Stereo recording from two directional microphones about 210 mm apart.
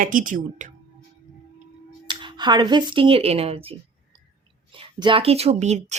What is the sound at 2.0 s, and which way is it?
Speech, 20° right (ahead or behind).